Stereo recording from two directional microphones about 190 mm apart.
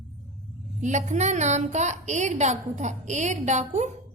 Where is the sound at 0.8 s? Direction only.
40° right (ahead or behind).